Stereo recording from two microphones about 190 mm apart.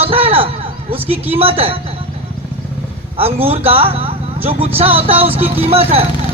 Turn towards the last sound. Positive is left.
turn(degrees=-30)  # may be behind; listen again after turning